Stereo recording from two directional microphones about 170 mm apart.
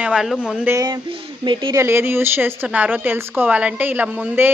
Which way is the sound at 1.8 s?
15° right (ahead or behind).